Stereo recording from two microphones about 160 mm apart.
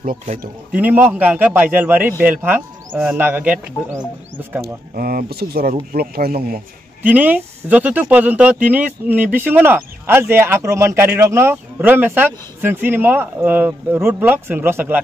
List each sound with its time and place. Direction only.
0.0 s speech: 60° right (ahead or behind)
0.7 s speech: 10° right (ahead or behind)
4.6 s speech: 65° right (ahead or behind)
7.0 s speech: 10° right (ahead or behind)